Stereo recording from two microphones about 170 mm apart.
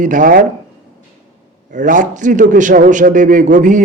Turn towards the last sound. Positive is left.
turn(degrees=-50)  # may be behind; listen again after turning